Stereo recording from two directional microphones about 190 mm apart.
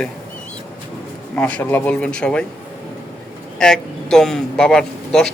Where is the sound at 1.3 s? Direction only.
10° left (ahead or behind).